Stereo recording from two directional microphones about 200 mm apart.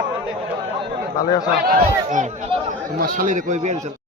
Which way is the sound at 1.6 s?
45° right (ahead or behind).